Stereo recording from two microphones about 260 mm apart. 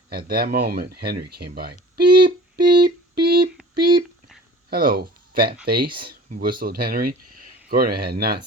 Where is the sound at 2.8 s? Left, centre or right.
Right.